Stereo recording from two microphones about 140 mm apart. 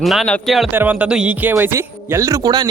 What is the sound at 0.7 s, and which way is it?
Speech, 10° right (ahead or behind).